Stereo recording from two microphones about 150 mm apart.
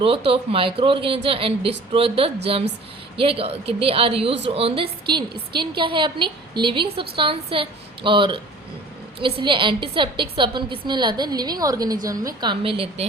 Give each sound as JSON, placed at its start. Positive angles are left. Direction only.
{"t": 0.0, "sound": "a woman's voice", "side_deg": -40}